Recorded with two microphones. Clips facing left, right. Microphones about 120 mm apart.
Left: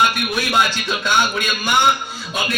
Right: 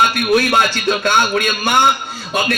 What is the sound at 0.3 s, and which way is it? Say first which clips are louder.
A man's voice: right 5 dB; 60° right (ahead or behind).